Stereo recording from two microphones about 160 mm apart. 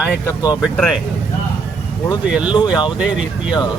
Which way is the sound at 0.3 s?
20° left (ahead or behind).